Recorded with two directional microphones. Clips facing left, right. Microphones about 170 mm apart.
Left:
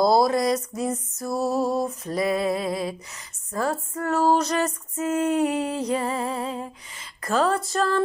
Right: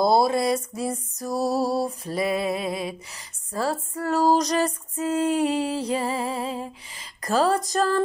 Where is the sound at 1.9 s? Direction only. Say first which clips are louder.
Left 1 dB; 30° right (ahead or behind).